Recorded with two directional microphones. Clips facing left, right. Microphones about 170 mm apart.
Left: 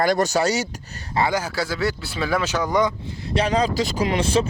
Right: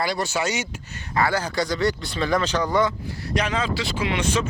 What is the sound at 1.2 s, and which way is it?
Speech, 15° left (ahead or behind).